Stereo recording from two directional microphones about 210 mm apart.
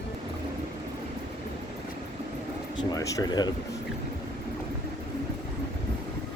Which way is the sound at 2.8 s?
15° left (ahead or behind).